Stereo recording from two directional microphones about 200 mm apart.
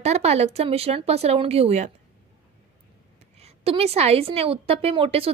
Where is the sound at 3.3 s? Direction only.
30° right (ahead or behind).